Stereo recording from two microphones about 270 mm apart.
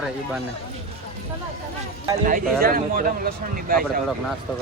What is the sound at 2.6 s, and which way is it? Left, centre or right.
Speech, right.